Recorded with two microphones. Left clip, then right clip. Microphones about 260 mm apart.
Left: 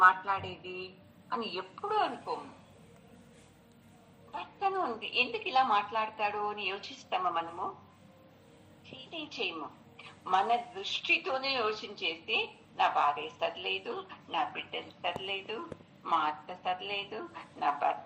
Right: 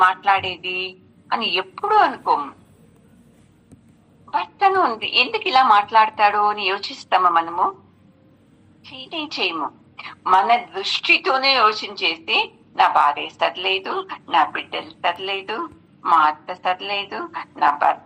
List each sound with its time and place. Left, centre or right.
0.0 s a woman's voice: right
1.8 s speech: right
2.0 s a woman's voice: right
4.3 s a woman's voice: right
8.8 s a woman's voice: right